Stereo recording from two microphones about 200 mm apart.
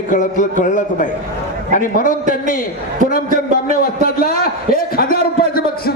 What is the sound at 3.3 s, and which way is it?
A man's voice, 45° left (ahead or behind).